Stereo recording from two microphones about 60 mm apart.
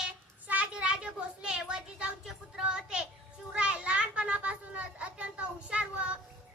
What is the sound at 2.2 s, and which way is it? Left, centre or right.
Music, centre.